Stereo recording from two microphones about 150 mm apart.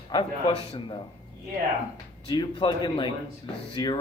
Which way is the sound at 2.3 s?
30° left (ahead or behind).